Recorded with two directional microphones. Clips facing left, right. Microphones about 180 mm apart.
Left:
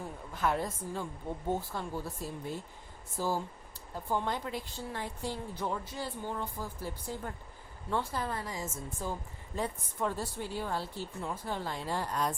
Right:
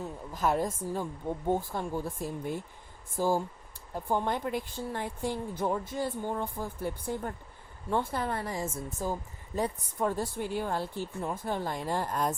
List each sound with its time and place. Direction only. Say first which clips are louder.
0.3 s a woman's voice: right 3 dB; 40° right (ahead or behind)